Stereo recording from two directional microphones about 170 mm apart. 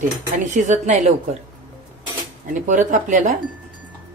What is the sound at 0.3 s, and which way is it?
Speech, 45° right (ahead or behind).